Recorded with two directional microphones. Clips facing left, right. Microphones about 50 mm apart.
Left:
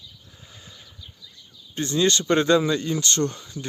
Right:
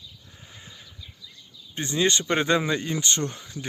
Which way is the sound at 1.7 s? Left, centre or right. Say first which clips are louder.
Left 2 dB; right.